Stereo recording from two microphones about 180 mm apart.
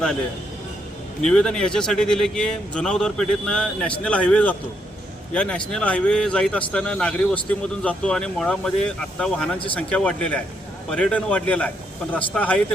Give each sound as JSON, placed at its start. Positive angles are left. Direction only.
{"t": 1.3, "sound": "a man's voice", "side_deg": 5}